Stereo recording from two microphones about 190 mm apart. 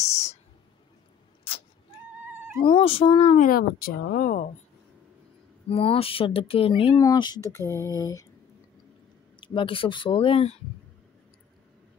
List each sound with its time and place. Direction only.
0.0 s a sound: 35° left (ahead or behind)
2.6 s speech: 30° left (ahead or behind); by 4.5 s 45° left (ahead or behind)
5.7 s speech: 30° left (ahead or behind)
9.4 s speech: 25° left (ahead or behind)